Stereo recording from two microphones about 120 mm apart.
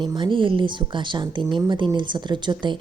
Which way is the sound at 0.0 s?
40° right (ahead or behind).